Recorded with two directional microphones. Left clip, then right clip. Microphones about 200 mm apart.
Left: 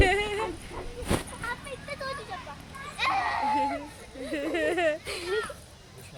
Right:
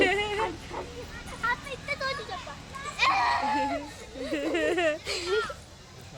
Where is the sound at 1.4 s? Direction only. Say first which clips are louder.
Right 5 dB; 20° right (ahead or behind).